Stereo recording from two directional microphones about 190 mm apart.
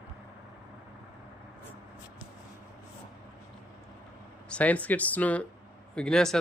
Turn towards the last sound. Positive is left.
turn(degrees=5)  # may be behind; listen again after turning